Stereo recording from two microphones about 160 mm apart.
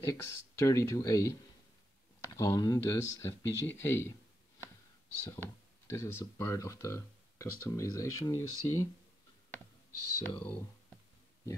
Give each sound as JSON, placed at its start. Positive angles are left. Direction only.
{"t": 0.0, "sound": "speech", "side_deg": 15}
{"t": 5.2, "sound": "speech", "side_deg": 15}
{"t": 10.2, "sound": "speech", "side_deg": 10}